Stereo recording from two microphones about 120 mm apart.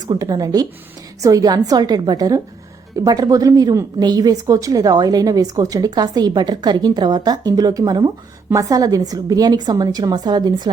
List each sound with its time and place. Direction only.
0.1 s a woman's voice: 35° right (ahead or behind)